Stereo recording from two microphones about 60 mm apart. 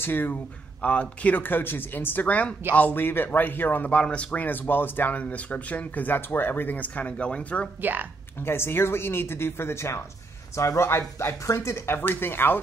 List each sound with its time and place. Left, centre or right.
0.0 s speech: left
0.8 s speech: left
3.9 s speech: centre
7.8 s speech: right
8.4 s speech: left